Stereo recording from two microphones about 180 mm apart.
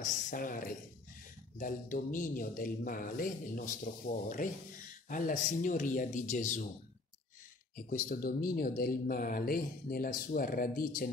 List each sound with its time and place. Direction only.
0.0 s speech: 50° left (ahead or behind)
7.7 s speech: 50° left (ahead or behind)